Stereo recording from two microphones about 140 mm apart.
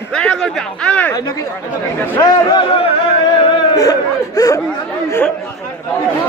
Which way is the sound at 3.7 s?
25° left (ahead or behind).